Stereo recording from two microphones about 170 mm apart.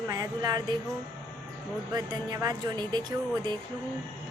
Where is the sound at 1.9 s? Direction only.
20° right (ahead or behind).